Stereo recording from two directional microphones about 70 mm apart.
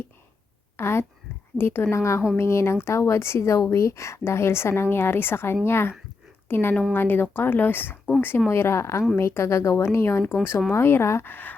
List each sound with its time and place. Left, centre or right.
0.8 s a woman's voice: left